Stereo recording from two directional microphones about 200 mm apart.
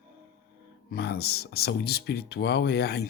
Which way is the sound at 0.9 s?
55° left (ahead or behind).